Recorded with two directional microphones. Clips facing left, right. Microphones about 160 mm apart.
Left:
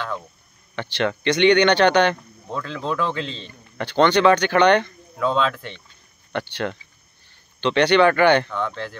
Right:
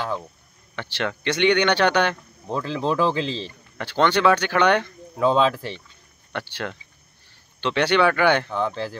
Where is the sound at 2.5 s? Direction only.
30° right (ahead or behind).